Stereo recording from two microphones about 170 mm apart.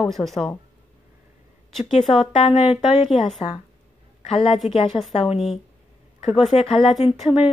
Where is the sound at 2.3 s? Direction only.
35° left (ahead or behind).